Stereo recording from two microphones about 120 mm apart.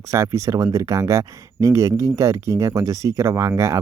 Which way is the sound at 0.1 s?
25° right (ahead or behind).